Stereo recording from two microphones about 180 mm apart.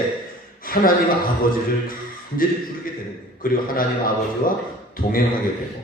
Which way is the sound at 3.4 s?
55° left (ahead or behind).